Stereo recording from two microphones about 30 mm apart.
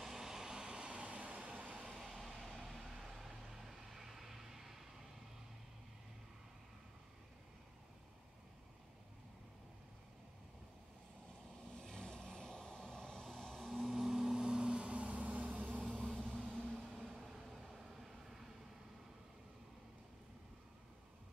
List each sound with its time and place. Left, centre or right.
0.0 s vehicle: centre
0.6 s vehicle: right
0.8 s vehicle: right
2.0 s a sound: centre
3.2 s vehicle: centre
3.5 s vehicle: centre
11.8 s vehicle: left
13.6 s vehicle: centre
13.8 s vehicle: centre
14.8 s vehicle: right
16.0 s vehicle: centre
17.3 s vehicle: centre